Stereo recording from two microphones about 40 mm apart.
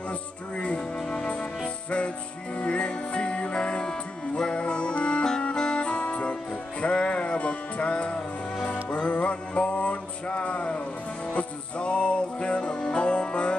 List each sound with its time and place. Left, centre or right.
0.6 s music: left
2.6 s music: left
11.8 s music: left